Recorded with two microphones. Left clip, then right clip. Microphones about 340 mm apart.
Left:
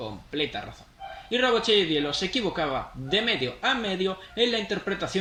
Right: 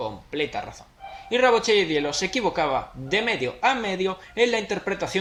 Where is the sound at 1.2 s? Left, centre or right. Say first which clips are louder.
Right 4 dB; centre.